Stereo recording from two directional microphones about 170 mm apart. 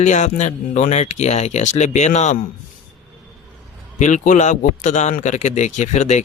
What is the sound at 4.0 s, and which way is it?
A man's voice, 45° left (ahead or behind).